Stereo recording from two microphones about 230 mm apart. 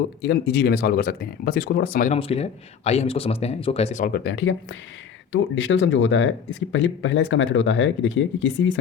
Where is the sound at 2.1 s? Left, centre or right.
Left.